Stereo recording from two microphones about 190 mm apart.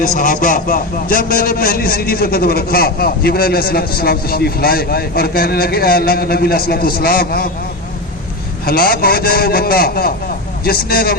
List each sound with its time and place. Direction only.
0.0 s a man's voice: 45° left (ahead or behind)
8.6 s a man's voice: 50° left (ahead or behind)